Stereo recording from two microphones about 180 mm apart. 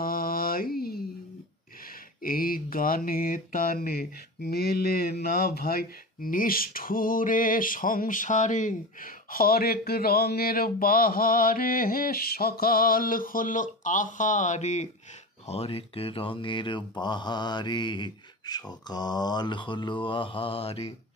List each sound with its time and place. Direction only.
0.0 s mantra: 55° left (ahead or behind)
2.2 s a sound: 55° left (ahead or behind)
15.4 s speech: 35° left (ahead or behind)